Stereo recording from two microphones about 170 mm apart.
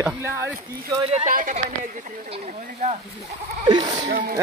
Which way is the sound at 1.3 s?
55° right (ahead or behind).